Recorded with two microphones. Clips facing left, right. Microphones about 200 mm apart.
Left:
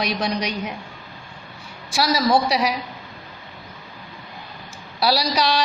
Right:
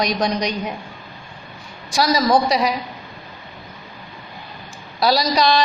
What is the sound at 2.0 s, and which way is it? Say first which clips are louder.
Speech: right 2 dB; 5° left (ahead or behind).